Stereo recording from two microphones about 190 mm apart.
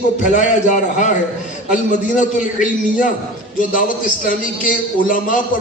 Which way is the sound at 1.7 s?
40° left (ahead or behind).